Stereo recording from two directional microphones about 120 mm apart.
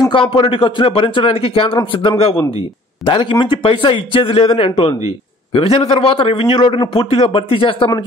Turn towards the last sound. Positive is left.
turn(degrees=50)  # may be behind; listen again after turning